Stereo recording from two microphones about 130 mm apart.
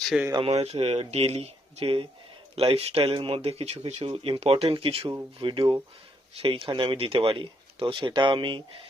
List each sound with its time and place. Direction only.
0.3 s speech: 50° right (ahead or behind)
3.9 s speech: 45° right (ahead or behind)